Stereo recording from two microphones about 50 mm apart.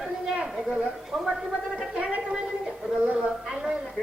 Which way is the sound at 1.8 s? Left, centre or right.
Right.